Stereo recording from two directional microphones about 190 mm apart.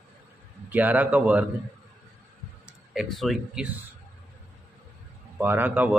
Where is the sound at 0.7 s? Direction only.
10° right (ahead or behind).